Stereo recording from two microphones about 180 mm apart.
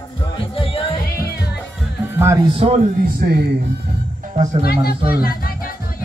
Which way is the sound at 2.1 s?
15° right (ahead or behind).